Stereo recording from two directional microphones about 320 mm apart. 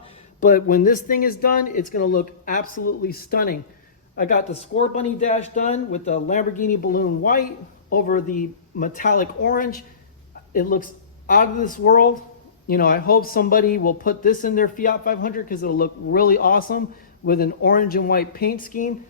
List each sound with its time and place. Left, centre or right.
0.3 s speech: left